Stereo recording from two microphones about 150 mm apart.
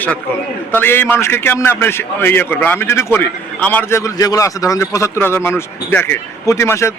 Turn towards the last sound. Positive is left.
turn(degrees=20)  # may be behind; listen again after turning